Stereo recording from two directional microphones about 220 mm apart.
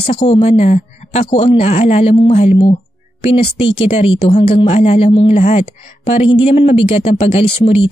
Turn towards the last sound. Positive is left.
turn(degrees=25)  # may be behind; listen again after turning